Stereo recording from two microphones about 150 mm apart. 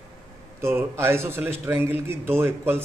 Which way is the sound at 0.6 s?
15° right (ahead or behind).